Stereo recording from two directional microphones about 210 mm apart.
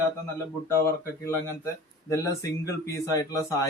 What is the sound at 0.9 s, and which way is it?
A man's voice, 10° left (ahead or behind).